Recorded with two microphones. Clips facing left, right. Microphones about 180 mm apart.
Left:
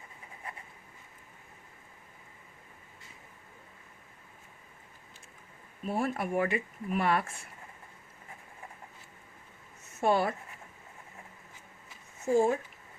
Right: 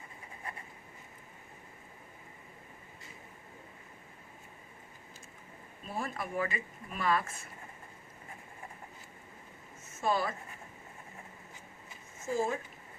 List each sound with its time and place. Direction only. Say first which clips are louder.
5.9 s speech: left 6 dB; 60° left (ahead or behind)
9.8 s a sound: left 5 dB; 65° left (ahead or behind)
12.2 s speech: left 7 dB; 65° left (ahead or behind)